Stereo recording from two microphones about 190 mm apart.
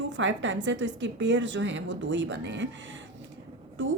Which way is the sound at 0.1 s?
75° right (ahead or behind).